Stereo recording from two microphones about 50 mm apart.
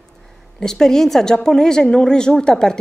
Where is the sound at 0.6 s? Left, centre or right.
Centre.